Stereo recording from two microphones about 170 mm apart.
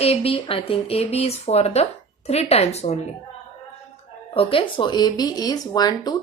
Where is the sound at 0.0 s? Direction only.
35° left (ahead or behind).